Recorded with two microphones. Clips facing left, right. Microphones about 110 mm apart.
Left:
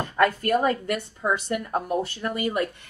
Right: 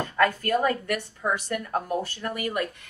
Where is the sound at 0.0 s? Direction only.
25° left (ahead or behind).